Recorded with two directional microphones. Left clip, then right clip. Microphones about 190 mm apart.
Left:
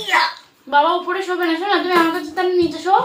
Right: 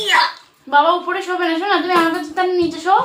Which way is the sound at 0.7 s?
15° right (ahead or behind).